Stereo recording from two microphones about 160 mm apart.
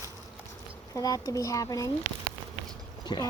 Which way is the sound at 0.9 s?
20° left (ahead or behind).